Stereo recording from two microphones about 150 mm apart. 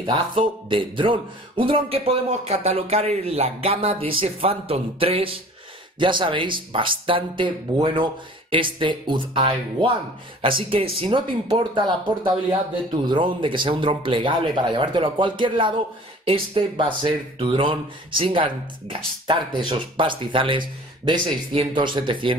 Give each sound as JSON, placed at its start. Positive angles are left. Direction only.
{"t": 0.0, "sound": "speech", "side_deg": -35}